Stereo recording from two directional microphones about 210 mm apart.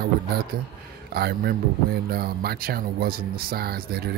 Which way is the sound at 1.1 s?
50° right (ahead or behind).